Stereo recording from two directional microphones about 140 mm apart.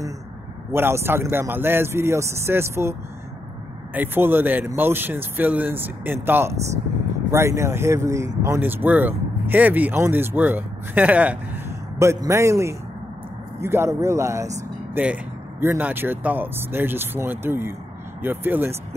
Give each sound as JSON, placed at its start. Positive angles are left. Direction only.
{"t": 0.7, "sound": "speech", "side_deg": -15}